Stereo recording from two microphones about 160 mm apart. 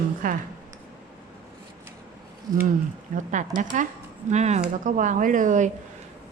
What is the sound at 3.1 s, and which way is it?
A woman's voice, 55° right (ahead or behind).